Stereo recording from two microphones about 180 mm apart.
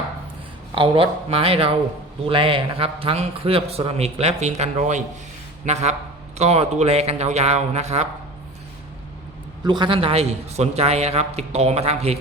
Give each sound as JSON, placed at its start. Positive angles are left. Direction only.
{"t": 0.8, "sound": "a man's voice", "side_deg": -30}
{"t": 9.6, "sound": "a man's voice", "side_deg": -25}